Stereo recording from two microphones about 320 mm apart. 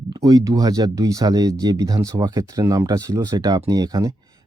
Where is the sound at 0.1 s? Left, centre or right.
Centre.